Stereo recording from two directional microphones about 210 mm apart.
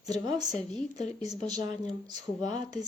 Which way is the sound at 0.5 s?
30° left (ahead or behind).